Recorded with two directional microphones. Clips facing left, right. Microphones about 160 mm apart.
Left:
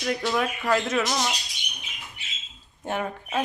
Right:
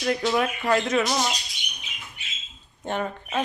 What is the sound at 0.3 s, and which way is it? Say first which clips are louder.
Speech: right 1 dB; centre (ahead or behind).